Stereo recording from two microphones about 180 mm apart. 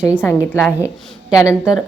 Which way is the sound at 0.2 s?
15° left (ahead or behind).